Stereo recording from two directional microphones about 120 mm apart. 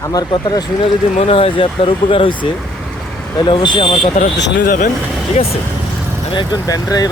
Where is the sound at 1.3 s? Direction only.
50° left (ahead or behind).